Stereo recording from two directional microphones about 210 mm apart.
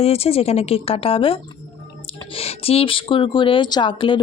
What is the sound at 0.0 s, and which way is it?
A woman's voice, 30° left (ahead or behind).